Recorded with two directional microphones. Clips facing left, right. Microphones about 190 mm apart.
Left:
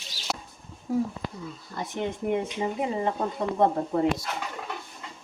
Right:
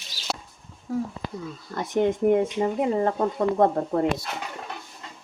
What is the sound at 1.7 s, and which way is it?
Speech, 50° right (ahead or behind).